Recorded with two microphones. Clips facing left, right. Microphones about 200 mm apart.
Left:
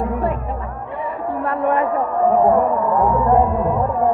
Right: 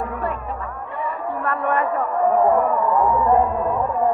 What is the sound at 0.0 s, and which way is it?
Chatter, 25° left (ahead or behind).